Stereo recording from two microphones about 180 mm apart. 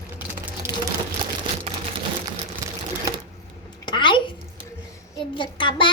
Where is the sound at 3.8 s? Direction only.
25° left (ahead or behind).